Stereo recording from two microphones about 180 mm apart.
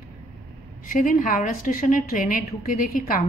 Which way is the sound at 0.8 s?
45° left (ahead or behind).